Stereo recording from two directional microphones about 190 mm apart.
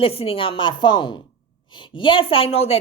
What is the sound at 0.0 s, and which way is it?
A woman's voice, 30° left (ahead or behind).